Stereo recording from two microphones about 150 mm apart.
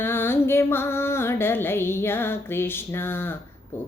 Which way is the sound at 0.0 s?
15° left (ahead or behind).